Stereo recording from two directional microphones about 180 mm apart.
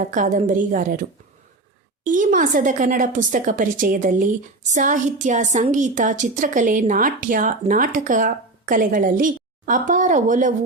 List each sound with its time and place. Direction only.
0.1 s a woman's voice: 45° right (ahead or behind)
2.0 s a woman's voice: 45° right (ahead or behind)